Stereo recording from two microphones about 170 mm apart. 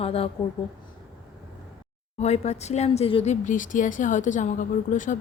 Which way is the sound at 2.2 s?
40° left (ahead or behind).